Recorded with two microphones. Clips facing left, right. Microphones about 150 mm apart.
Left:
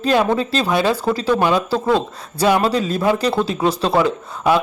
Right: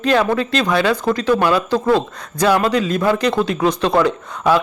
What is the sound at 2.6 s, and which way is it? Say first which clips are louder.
Speech: right 1 dB; 35° left (ahead or behind).